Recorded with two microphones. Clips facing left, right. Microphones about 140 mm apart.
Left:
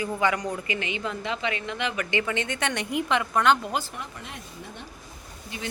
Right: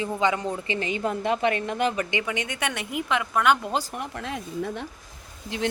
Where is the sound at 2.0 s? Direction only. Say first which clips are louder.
Left 1 dB; 15° right (ahead or behind).